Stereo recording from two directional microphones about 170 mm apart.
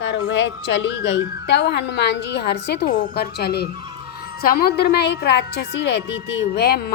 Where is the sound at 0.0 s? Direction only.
90° left.